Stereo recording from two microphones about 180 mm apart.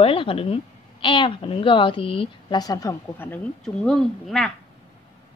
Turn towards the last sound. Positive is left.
turn(degrees=0)  # may be behind; listen again after turning